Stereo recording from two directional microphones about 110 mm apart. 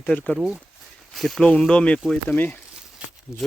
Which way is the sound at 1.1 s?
Centre (ahead or behind).